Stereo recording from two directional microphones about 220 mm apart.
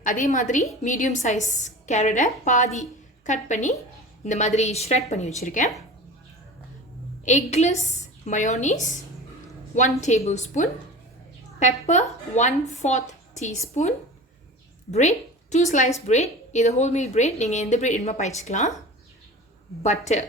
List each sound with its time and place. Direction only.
0.0 s a woman's voice: 35° left (ahead or behind)
7.3 s a woman's voice: 30° left (ahead or behind)
10.0 s a woman's voice: 30° left (ahead or behind)
14.8 s a woman's voice: 30° left (ahead or behind)
19.8 s a woman's voice: 30° left (ahead or behind)